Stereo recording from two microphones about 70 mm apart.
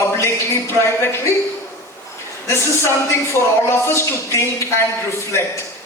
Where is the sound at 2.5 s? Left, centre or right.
Left.